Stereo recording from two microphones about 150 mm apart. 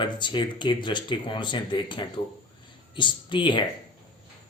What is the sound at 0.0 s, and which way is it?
Speech, 30° left (ahead or behind).